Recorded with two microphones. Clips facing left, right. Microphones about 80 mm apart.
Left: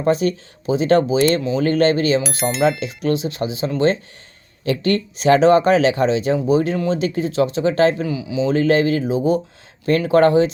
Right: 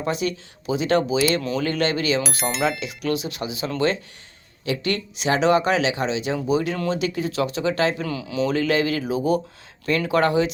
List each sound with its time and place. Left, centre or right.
0.0 s speech: left
1.4 s speech: left
1.6 s speech: left
2.2 s speech: centre
2.8 s speech: left
8.0 s speech: centre
8.4 s speech: left
10.1 s speech: left